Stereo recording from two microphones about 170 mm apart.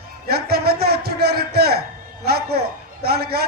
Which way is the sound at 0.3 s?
65° right (ahead or behind).